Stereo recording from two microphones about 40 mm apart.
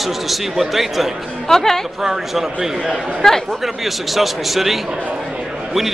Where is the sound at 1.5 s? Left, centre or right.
Centre.